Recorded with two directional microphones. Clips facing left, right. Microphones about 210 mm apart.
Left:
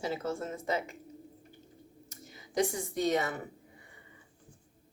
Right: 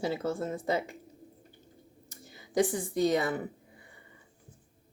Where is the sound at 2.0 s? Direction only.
30° right (ahead or behind).